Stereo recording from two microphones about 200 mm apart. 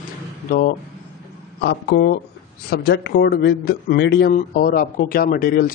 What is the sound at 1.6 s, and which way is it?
Speech, 60° left (ahead or behind).